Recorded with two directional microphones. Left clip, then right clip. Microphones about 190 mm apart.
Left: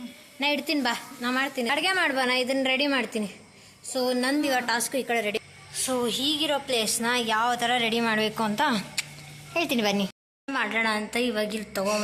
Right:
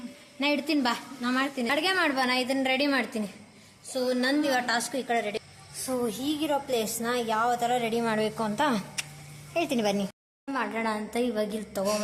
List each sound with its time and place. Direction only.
0.3 s a woman's voice: 5° left (ahead or behind)
5.8 s a woman's voice: centre (ahead or behind)